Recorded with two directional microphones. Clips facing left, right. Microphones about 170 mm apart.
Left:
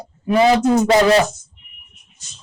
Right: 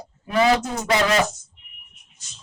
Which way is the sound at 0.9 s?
35° left (ahead or behind).